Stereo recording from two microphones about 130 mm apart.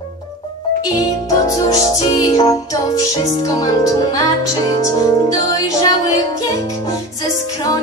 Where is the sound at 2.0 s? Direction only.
30° left (ahead or behind).